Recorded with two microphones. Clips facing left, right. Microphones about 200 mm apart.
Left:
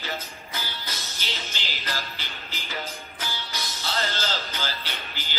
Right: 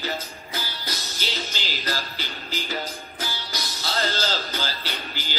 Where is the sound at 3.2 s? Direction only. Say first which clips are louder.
Right 2 dB; 35° right (ahead or behind).